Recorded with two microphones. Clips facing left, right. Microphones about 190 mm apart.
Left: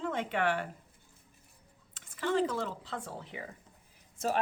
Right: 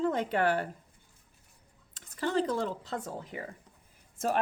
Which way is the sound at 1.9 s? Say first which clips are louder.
Right 1 dB; 40° right (ahead or behind).